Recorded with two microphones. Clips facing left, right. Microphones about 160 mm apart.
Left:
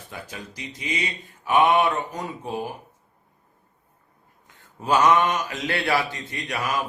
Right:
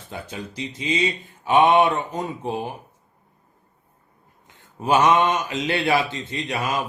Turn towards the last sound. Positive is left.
turn(degrees=-20)  # may be behind; listen again after turning